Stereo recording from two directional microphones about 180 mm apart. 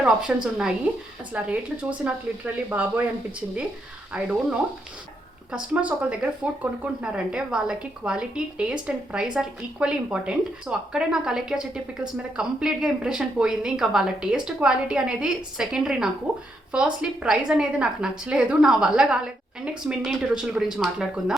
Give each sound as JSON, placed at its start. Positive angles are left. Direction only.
{"t": 0.0, "sound": "speech", "side_deg": -5}
{"t": 4.1, "sound": "speech", "side_deg": -5}